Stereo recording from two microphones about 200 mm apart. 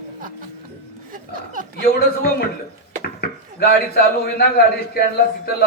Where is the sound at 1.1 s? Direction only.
40° right (ahead or behind).